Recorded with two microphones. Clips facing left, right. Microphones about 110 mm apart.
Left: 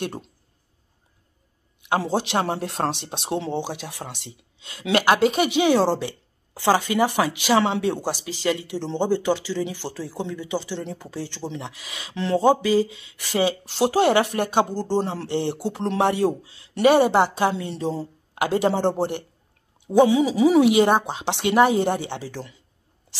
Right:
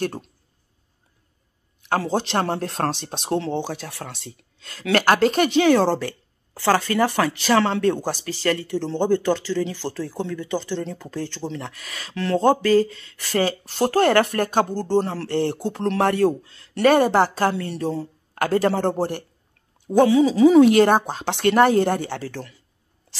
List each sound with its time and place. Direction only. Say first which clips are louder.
1.9 s a woman's voice: even; 15° left (ahead or behind)
3.3 s a woman's voice: right 2 dB; 15° left (ahead or behind)
4.3 s a woman's voice: right 1 dB; centre (ahead or behind)
12.2 s a woman's voice: even; 20° left (ahead or behind)
17.4 s a woman's voice: right 1 dB; 15° left (ahead or behind)
19.9 s a woman's voice: right 1 dB; 15° left (ahead or behind)
21.2 s a woman's voice: right 1 dB; 10° left (ahead or behind)